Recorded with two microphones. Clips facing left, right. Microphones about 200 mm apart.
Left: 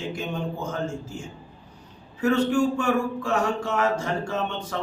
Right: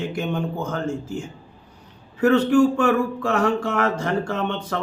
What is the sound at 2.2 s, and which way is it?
A man's voice, 60° right (ahead or behind).